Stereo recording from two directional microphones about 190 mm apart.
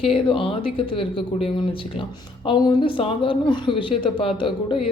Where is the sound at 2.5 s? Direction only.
25° left (ahead or behind).